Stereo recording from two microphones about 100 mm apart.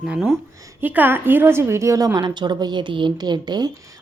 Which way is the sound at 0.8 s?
20° right (ahead or behind).